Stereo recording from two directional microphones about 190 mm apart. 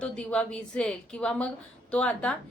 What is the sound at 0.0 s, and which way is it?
A woman's voice, 5° left (ahead or behind).